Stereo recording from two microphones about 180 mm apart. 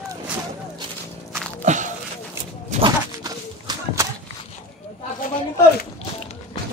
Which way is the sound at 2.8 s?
20° right (ahead or behind).